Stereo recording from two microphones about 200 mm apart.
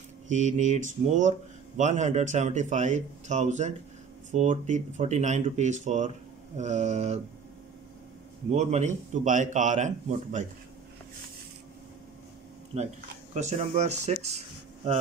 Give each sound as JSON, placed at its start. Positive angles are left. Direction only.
{"t": 0.3, "sound": "speech", "side_deg": -35}
{"t": 8.5, "sound": "speech", "side_deg": -35}
{"t": 12.7, "sound": "speech", "side_deg": -30}